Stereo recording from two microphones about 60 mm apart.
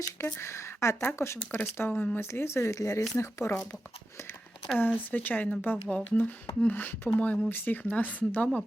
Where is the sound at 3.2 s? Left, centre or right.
Left.